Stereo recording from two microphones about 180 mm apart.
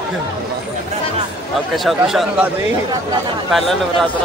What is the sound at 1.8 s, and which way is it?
Speech, centre (ahead or behind).